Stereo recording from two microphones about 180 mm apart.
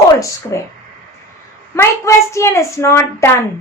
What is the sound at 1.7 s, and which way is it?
Speech, 15° left (ahead or behind).